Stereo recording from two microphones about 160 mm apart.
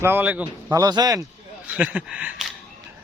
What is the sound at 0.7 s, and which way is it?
Speech, 25° right (ahead or behind).